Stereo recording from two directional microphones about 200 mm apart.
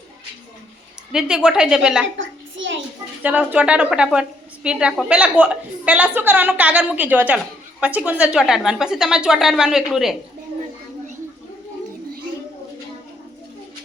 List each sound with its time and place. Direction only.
1.1 s a woman's voice: 5° right (ahead or behind)
2.1 s a sound: 70° right (ahead or behind)
3.2 s a woman's voice: 5° right (ahead or behind)